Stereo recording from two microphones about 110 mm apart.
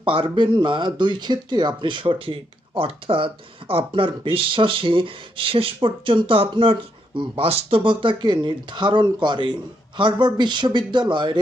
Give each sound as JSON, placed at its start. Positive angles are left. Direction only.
{"t": 0.0, "sound": "speech", "side_deg": -50}